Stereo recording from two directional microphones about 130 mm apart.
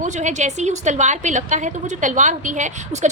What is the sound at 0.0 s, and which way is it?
A woman's voice, 65° right (ahead or behind).